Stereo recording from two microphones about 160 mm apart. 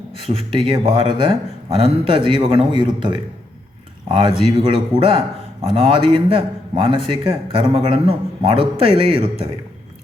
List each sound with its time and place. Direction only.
0.5 s speech: 35° right (ahead or behind)